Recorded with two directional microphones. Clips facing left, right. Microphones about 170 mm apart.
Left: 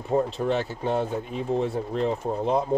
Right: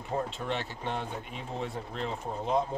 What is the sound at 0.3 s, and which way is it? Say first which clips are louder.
Speech: left 9 dB; 40° left (ahead or behind).